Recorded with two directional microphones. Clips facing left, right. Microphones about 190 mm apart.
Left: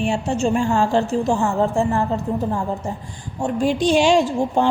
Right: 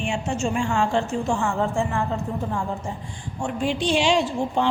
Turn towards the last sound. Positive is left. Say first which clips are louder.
# left 4 dB
turn(degrees=45)  # may be behind; listen again after turning